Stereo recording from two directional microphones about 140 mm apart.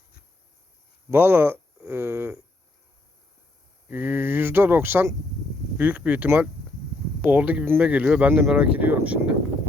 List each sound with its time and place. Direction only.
1.1 s speech: 15° right (ahead or behind)
3.8 s speech: 15° right (ahead or behind)